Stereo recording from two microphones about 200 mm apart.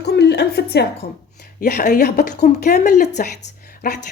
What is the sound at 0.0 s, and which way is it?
Music, 55° left (ahead or behind).